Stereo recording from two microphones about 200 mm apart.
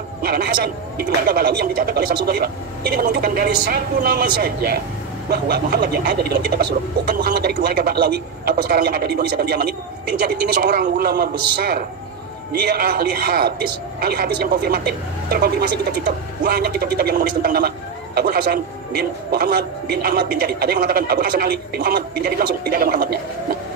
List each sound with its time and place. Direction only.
0.2 s speech: 50° right (ahead or behind)